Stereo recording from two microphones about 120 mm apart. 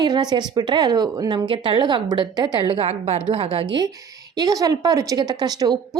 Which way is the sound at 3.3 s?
50° right (ahead or behind).